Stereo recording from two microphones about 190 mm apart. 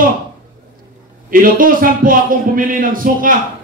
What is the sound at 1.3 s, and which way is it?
A man's voice, 45° right (ahead or behind).